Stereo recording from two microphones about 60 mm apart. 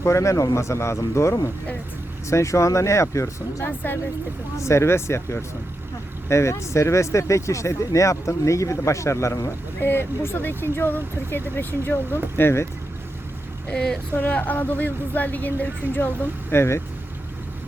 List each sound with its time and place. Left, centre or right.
0.0 s speech: left
9.8 s speech: left
13.7 s speech: centre
14.2 s a woman's voice: left
16.5 s speech: left